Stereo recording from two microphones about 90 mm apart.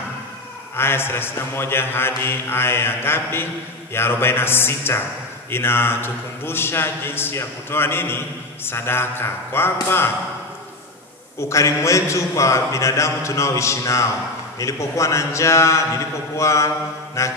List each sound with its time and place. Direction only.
0.7 s a man's voice: 25° left (ahead or behind)
11.4 s a man's voice: 35° left (ahead or behind)